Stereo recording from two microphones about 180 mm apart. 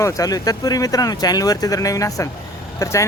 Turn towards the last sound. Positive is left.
turn(degrees=15)  # may be behind; listen again after turning